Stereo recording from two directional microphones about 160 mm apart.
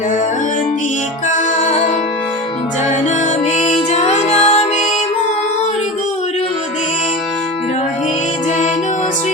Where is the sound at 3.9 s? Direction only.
45° left (ahead or behind).